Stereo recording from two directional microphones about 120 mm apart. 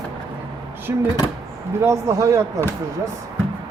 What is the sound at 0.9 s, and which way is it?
Speech, 20° right (ahead or behind).